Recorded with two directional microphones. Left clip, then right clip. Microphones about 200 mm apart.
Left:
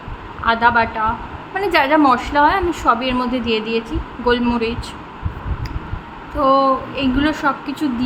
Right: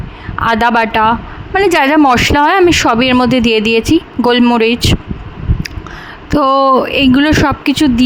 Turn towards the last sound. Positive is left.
turn(degrees=-55)  # may be behind; listen again after turning